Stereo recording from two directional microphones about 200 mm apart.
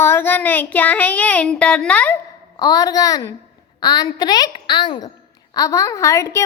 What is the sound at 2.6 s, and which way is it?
A child's voice, 20° left (ahead or behind).